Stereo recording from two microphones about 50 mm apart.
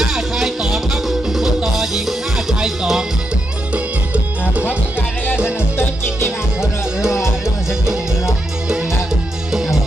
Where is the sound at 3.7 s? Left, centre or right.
Right.